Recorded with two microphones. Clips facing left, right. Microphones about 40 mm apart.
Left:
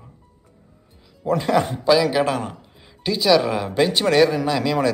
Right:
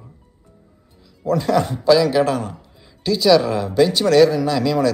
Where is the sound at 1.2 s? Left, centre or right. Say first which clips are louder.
Right 1 dB; left.